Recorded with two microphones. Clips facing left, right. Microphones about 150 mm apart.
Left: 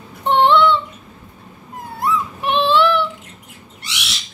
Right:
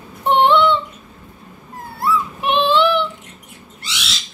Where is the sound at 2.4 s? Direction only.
15° right (ahead or behind).